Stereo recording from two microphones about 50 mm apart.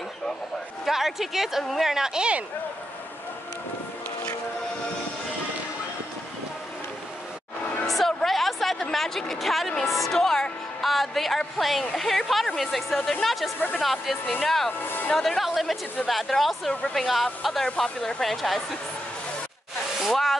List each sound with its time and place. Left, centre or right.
0.8 s a woman's voice: centre
7.8 s a sound: centre
8.9 s a woman's voice: centre
14.8 s music: left
15.1 s music: centre
16.1 s a woman's voice: centre
20.0 s speech: centre